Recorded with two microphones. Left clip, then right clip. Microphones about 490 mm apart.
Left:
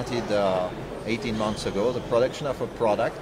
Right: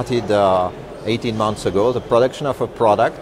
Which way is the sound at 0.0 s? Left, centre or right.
Right.